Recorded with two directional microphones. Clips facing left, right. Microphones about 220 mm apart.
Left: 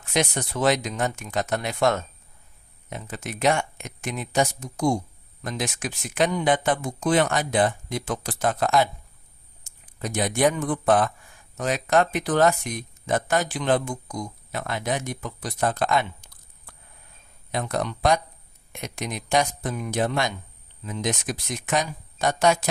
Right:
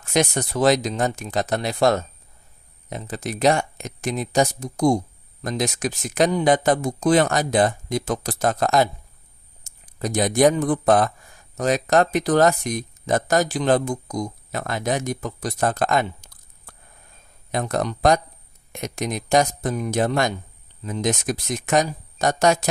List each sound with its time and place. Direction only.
0.0 s a man's voice: 45° right (ahead or behind)